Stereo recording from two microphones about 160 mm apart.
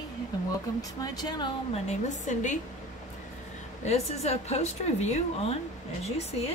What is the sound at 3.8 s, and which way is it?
A woman's voice, 40° left (ahead or behind).